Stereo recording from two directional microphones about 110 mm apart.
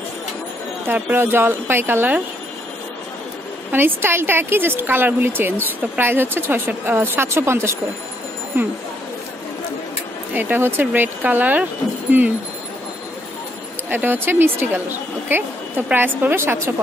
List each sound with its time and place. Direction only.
0.8 s speech: 20° right (ahead or behind)
3.7 s speech: 20° right (ahead or behind)
10.3 s speech: 20° right (ahead or behind)
13.8 s speech: 20° right (ahead or behind)